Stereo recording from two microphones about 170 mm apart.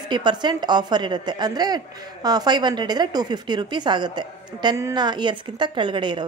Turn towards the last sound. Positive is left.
turn(degrees=-30)  # may be behind; listen again after turning